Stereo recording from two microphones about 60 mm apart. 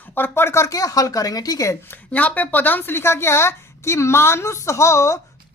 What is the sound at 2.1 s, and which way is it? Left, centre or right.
A woman's voice, left.